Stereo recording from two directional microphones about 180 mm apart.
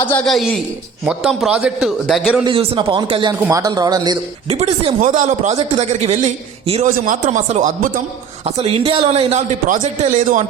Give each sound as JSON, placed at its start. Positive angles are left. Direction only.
{"t": 0.0, "sound": "a man's voice", "side_deg": 10}
{"t": 2.4, "sound": "speech", "side_deg": -30}
{"t": 4.4, "sound": "a man's voice", "side_deg": -35}
{"t": 4.9, "sound": "a man's voice", "side_deg": -45}
{"t": 6.9, "sound": "speech", "side_deg": -50}
{"t": 8.4, "sound": "a man's voice", "side_deg": -35}